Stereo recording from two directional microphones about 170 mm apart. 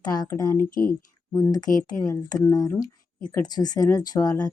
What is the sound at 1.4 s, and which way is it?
A woman's voice, 20° left (ahead or behind).